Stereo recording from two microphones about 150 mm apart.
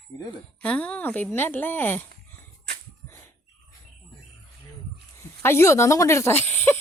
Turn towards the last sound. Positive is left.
turn(degrees=15)  # may be behind; listen again after turning